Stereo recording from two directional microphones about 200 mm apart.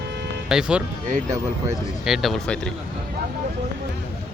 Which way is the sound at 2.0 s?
Centre (ahead or behind).